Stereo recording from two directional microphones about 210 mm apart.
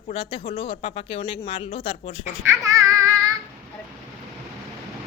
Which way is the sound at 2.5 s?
15° right (ahead or behind).